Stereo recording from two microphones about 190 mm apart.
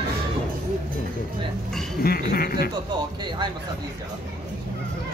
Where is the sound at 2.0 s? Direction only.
50° left (ahead or behind).